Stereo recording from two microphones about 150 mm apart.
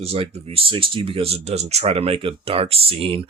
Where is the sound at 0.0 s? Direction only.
40° right (ahead or behind).